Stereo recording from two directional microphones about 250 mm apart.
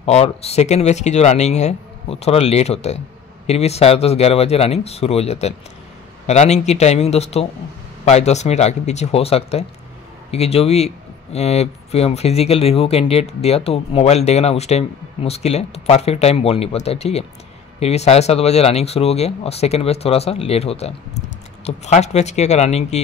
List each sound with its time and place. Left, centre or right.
0.0 s speech: left